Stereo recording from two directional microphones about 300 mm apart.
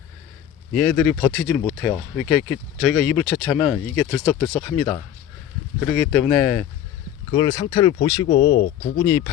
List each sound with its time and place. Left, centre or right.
0.7 s speech: centre
7.3 s speech: centre